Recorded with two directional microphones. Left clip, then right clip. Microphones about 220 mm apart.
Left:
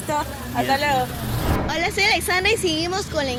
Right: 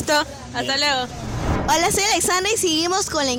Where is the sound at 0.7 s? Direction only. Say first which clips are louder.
Even; 50° right (ahead or behind).